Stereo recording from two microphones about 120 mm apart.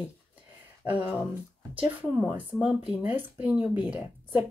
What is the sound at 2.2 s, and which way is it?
Speech, 5° right (ahead or behind).